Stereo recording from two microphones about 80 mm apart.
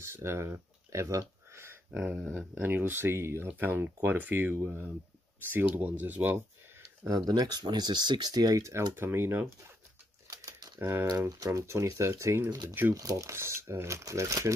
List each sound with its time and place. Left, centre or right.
0.0 s speech: right
1.5 s a sound: right
1.9 s speech: centre
7.1 s speech: right
8.9 s speech: right
10.3 s a sound: right
10.8 s speech: right
11.2 s speech: right
12.9 s speech: right